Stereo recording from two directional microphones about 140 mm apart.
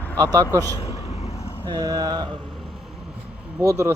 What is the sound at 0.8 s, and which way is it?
Vehicle, 50° left (ahead or behind).